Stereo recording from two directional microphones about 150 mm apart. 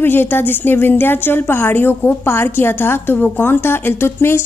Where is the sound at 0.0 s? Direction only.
15° left (ahead or behind).